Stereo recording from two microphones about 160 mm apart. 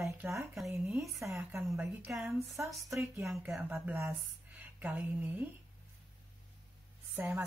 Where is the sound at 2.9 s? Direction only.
15° right (ahead or behind).